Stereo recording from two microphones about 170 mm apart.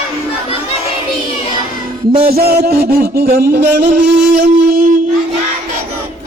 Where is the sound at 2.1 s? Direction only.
60° right (ahead or behind).